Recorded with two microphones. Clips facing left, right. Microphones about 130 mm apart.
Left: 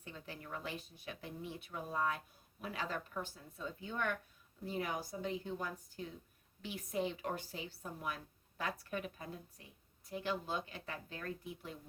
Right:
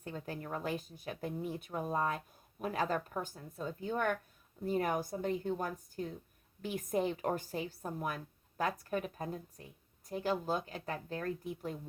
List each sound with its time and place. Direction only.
0.0 s speech: 45° right (ahead or behind)